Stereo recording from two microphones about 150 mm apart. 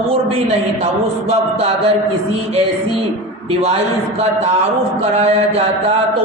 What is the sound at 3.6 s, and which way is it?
A man's voice, 45° right (ahead or behind).